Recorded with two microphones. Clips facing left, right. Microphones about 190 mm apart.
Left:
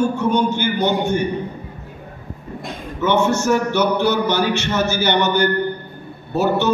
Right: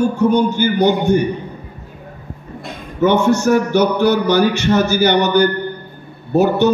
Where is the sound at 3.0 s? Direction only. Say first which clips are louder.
Right 4 dB; 15° right (ahead or behind).